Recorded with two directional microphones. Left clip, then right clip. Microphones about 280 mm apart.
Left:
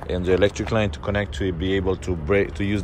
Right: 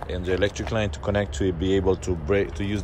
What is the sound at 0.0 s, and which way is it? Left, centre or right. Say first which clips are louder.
Speech: left 5 dB; centre.